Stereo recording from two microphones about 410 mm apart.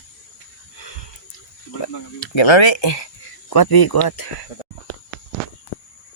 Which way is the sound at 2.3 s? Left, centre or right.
Left.